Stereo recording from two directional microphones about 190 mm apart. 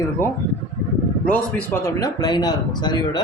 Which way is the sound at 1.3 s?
10° left (ahead or behind).